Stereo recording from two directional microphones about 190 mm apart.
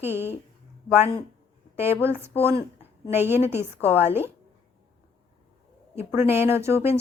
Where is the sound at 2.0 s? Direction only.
10° right (ahead or behind).